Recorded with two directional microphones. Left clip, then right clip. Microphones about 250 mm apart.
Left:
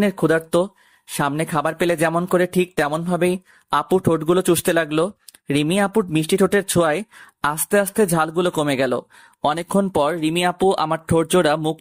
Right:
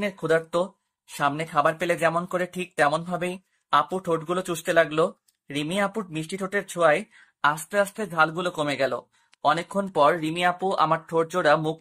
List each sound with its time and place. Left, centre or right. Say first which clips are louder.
0.0 s speech: left 5 dB; left